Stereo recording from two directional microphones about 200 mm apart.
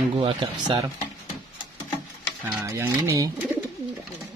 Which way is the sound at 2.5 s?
10° right (ahead or behind).